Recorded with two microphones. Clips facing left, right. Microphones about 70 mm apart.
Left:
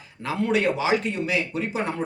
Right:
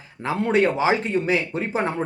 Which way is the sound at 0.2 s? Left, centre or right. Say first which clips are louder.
Right 3 dB; right.